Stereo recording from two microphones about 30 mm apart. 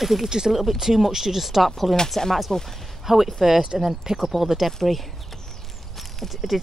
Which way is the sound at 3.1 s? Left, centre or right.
Centre.